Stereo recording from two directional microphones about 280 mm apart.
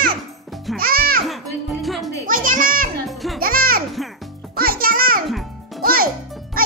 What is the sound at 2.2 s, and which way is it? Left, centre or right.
Music, right.